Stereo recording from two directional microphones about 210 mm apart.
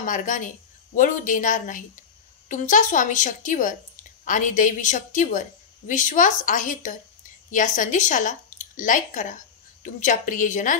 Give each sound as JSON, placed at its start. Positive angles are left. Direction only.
{"t": 0.0, "sound": "a woman's voice", "side_deg": 40}